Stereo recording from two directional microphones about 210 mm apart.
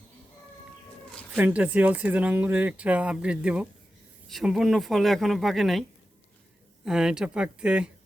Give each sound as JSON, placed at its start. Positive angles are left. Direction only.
{"t": 1.4, "sound": "speech", "side_deg": -5}
{"t": 6.8, "sound": "speech", "side_deg": -5}